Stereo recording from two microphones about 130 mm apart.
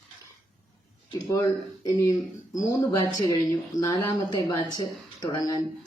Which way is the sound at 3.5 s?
30° left (ahead or behind).